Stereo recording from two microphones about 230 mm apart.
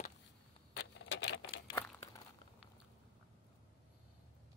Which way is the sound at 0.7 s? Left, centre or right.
Left.